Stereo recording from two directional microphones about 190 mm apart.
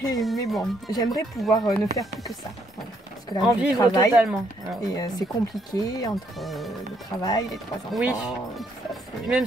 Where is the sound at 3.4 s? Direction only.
5° right (ahead or behind).